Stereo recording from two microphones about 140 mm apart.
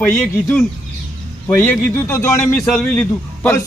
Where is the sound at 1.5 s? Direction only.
15° left (ahead or behind).